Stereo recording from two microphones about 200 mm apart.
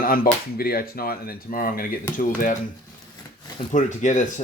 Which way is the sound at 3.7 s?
40° left (ahead or behind).